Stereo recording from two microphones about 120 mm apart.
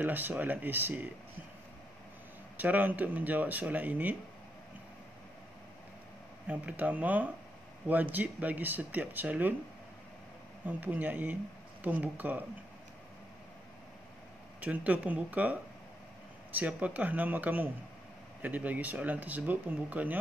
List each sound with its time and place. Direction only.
0.0 s speech: 15° right (ahead or behind)
2.5 s speech: 15° right (ahead or behind)
6.4 s speech: 10° right (ahead or behind)
10.6 s speech: 15° right (ahead or behind)
14.6 s speech: 10° right (ahead or behind)